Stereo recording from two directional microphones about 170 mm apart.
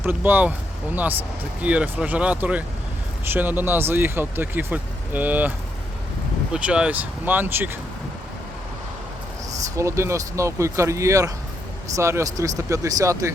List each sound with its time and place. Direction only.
0.0 s speech: 10° right (ahead or behind)
1.6 s speech: 5° right (ahead or behind)
9.7 s speech: 15° right (ahead or behind)